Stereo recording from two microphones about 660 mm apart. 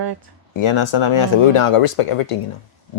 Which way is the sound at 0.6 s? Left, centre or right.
Left.